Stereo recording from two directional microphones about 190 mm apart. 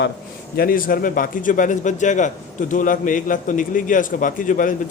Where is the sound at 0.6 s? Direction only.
50° left (ahead or behind).